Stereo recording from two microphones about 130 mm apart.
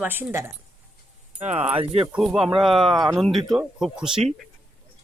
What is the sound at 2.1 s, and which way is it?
Speech, 5° right (ahead or behind).